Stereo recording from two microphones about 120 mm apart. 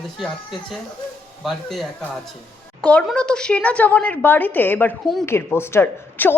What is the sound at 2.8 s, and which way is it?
A woman's voice, 10° left (ahead or behind).